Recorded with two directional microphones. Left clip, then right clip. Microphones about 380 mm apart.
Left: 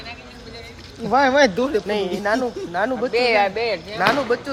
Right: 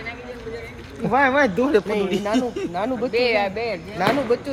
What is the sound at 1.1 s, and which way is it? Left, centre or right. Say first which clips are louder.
Speech: left 2 dB; left.